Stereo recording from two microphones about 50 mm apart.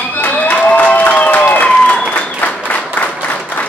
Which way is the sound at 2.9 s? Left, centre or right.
Left.